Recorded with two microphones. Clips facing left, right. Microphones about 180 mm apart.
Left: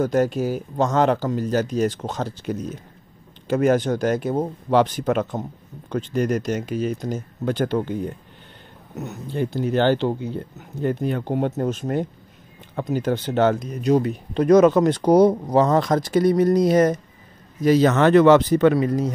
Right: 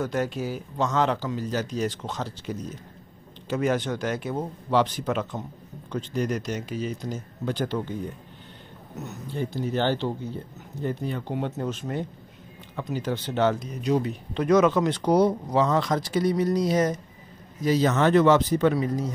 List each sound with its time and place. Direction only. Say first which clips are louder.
0.0 s speech: left 7 dB; 45° left (ahead or behind)
9.3 s speech: left 6 dB; 60° left (ahead or behind)
17.6 s speech: left 5 dB; 65° left (ahead or behind)